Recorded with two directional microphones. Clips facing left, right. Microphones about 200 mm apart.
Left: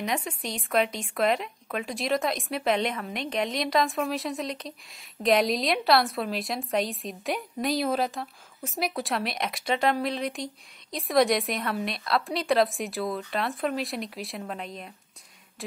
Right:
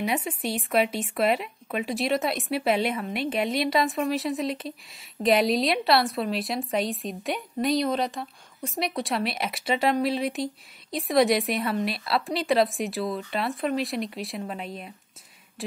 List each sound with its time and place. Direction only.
0.0 s a woman's voice: 5° right (ahead or behind)